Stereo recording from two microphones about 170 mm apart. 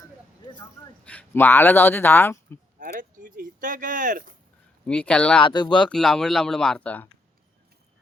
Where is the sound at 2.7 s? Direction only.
55° right (ahead or behind).